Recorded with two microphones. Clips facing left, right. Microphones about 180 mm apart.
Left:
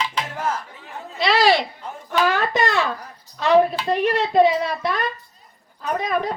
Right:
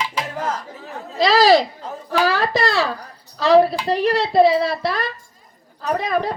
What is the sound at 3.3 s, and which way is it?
A woman's voice, 35° right (ahead or behind).